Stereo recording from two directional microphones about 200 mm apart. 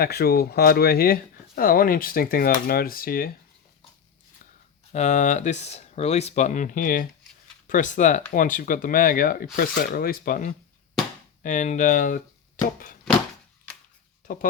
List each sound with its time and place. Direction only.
0.0 s speech: 50° left (ahead or behind)
4.9 s speech: 35° left (ahead or behind)
14.2 s a sound: 40° left (ahead or behind)